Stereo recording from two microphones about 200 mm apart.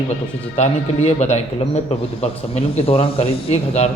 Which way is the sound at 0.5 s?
35° left (ahead or behind).